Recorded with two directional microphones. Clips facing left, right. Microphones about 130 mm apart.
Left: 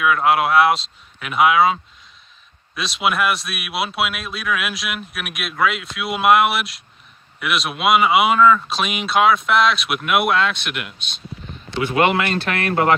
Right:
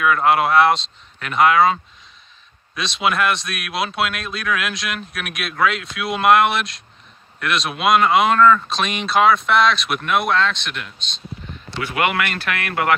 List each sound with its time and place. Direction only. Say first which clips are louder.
0.0 s speech: even; 5° left (ahead or behind)
11.8 s speech: left 3 dB; 25° left (ahead or behind)